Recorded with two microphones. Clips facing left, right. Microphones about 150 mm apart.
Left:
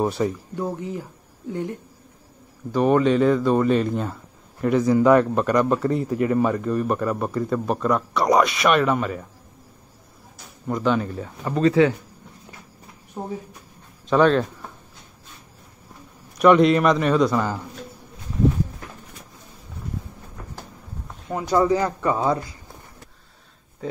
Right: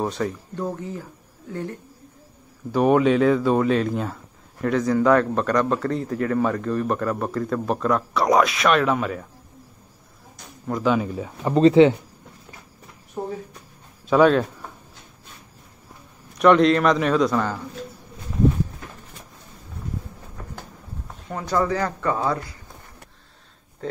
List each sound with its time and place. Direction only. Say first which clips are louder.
0.0 s speech: left 3 dB; 10° left (ahead or behind)
2.7 s speech: right 1 dB; 5° right (ahead or behind)
10.3 s speech: left 1 dB; centre (ahead or behind)
11.4 s speech: right 4 dB; 25° right (ahead or behind)
14.0 s speech: right 1 dB; 5° right (ahead or behind)
16.3 s speech: left 1 dB; 5° left (ahead or behind)
21.3 s speech: left 4 dB; 15° left (ahead or behind)